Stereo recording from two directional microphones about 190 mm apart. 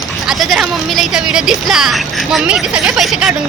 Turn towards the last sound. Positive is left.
turn(degrees=0)  # may be behind; listen again after turning